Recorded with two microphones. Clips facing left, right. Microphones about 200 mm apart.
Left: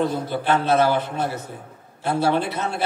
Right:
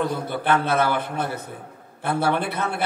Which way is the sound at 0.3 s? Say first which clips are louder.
Left 1 dB; 55° right (ahead or behind).